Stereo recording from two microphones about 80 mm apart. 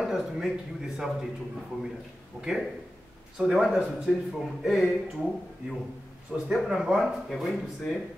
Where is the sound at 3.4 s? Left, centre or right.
Centre.